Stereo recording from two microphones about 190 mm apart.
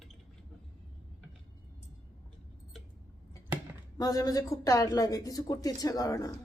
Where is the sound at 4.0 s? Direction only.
20° left (ahead or behind).